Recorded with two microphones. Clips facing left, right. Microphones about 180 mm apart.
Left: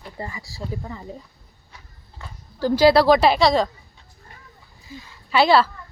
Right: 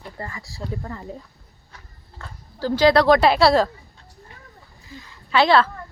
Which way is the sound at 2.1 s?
15° left (ahead or behind).